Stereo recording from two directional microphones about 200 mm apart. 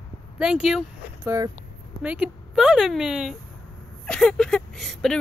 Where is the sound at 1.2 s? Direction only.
15° right (ahead or behind).